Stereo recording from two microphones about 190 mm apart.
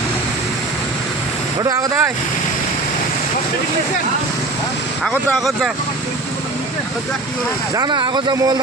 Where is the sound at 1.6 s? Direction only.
15° right (ahead or behind).